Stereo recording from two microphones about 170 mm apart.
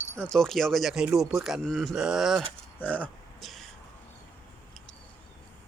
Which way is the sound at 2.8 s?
10° left (ahead or behind).